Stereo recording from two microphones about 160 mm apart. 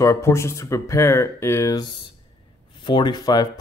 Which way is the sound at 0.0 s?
15° left (ahead or behind).